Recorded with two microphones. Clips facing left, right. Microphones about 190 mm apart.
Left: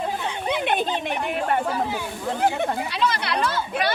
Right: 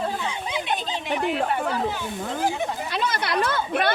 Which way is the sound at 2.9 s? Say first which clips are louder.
Even; 50° right (ahead or behind).